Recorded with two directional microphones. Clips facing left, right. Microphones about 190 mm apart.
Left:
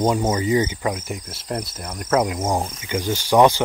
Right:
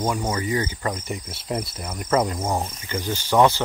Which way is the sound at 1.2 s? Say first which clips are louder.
Even; 5° right (ahead or behind).